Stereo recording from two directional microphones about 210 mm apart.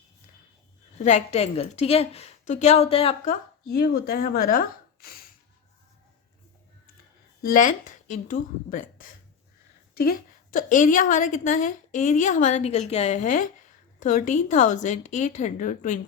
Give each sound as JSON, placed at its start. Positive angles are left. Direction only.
{"t": 0.9, "sound": "a woman's voice", "side_deg": 35}
{"t": 3.7, "sound": "speech", "side_deg": 45}
{"t": 7.4, "sound": "a woman's voice", "side_deg": 40}